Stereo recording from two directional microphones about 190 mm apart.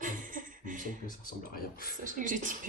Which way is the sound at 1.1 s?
50° left (ahead or behind).